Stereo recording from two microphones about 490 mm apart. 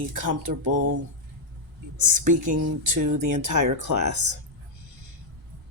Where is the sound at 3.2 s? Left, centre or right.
Right.